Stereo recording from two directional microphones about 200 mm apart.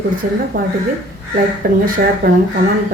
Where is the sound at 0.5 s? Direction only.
45° right (ahead or behind).